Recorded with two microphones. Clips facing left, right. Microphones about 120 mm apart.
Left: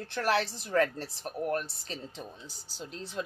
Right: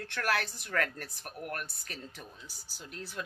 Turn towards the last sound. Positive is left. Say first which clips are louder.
# left 4 dB
turn(degrees=25)  # may be behind; listen again after turning